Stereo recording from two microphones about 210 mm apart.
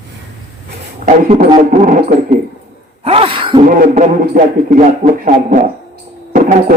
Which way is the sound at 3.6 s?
35° right (ahead or behind).